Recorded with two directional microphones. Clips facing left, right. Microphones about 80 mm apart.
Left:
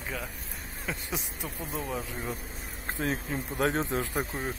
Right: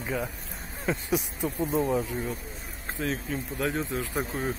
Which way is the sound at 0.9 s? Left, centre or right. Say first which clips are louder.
Right 8 dB; centre.